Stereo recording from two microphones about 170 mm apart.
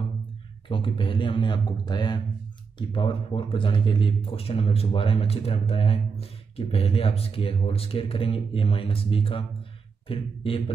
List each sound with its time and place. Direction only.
0.7 s a man's voice: 30° left (ahead or behind)